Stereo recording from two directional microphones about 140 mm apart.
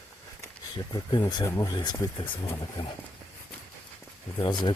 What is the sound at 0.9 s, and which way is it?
Speech, 30° left (ahead or behind).